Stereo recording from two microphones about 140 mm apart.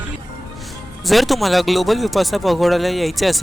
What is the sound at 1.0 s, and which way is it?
Speech, centre (ahead or behind).